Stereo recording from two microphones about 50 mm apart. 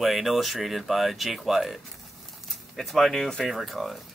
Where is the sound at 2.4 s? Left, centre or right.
Centre.